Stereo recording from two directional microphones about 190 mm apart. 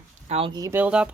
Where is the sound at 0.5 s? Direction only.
15° right (ahead or behind).